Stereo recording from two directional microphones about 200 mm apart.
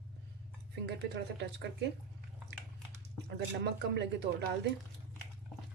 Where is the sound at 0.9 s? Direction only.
55° right (ahead or behind).